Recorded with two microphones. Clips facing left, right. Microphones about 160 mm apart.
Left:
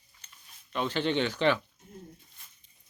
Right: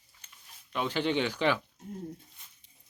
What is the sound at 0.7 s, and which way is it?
Speech, 10° right (ahead or behind).